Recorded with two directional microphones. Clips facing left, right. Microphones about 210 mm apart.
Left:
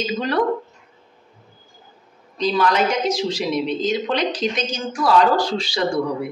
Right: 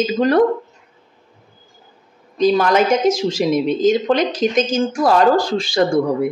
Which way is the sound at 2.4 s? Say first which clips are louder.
Right 5 dB; 45° right (ahead or behind).